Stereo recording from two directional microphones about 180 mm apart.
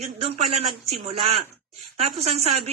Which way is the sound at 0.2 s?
35° right (ahead or behind).